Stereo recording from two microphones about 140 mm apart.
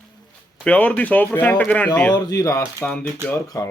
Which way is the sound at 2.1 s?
25° left (ahead or behind).